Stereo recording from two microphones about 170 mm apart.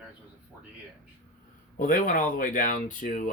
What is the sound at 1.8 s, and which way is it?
Speech, 55° left (ahead or behind).